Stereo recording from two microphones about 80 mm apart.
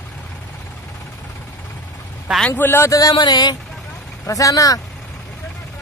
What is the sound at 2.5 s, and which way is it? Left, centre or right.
Speech, left.